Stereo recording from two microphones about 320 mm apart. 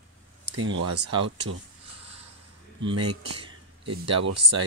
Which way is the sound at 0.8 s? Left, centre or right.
Right.